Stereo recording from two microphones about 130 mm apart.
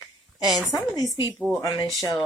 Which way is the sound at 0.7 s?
30° left (ahead or behind).